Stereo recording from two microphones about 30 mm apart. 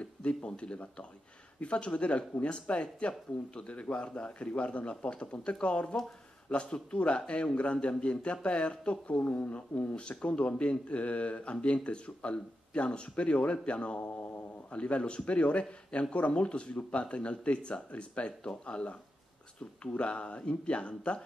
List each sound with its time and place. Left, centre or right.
0.0 s speech: left
9.9 s speech: left